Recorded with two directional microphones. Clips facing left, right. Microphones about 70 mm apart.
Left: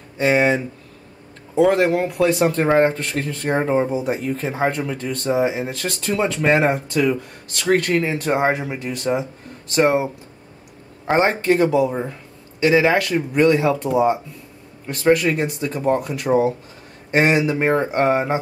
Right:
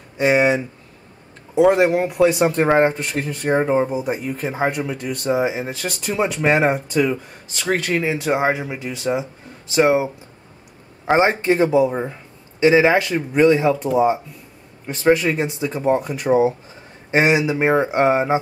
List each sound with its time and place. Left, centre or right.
0.2 s speech: centre
3.5 s speech: centre
11.5 s speech: right
14.9 s speech: centre